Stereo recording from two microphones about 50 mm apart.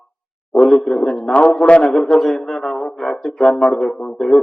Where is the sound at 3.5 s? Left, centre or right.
Left.